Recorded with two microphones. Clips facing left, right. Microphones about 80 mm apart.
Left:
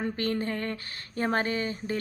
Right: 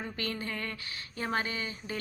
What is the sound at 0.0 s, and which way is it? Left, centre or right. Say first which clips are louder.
A woman's voice: left 7 dB; left.